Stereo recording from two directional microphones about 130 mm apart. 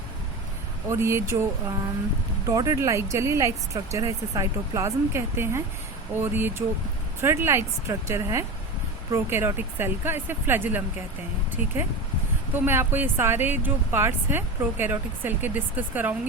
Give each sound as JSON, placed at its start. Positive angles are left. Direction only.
{"t": 0.9, "sound": "speech", "side_deg": -20}
{"t": 2.5, "sound": "speech", "side_deg": -25}